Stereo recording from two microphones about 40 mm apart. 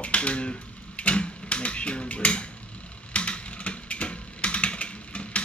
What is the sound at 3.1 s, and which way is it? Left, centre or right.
Typing, left.